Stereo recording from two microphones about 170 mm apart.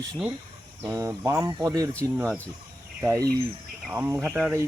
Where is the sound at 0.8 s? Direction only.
20° right (ahead or behind).